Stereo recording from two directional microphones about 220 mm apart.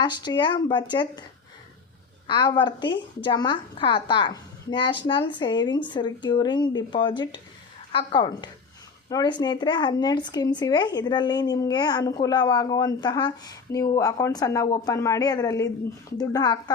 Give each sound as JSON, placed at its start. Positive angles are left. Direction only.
{"t": 0.0, "sound": "a woman's voice", "side_deg": 20}
{"t": 2.2, "sound": "a woman's voice", "side_deg": 20}